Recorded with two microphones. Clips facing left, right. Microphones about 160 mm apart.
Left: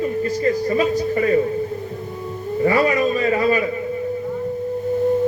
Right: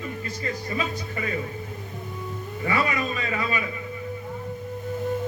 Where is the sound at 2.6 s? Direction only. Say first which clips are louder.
Left 9 dB; 35° left (ahead or behind).